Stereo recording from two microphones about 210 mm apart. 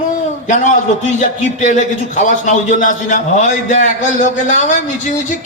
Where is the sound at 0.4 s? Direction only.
40° left (ahead or behind).